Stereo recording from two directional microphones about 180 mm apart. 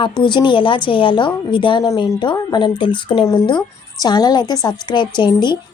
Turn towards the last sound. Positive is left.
turn(degrees=25)  # may be behind; listen again after turning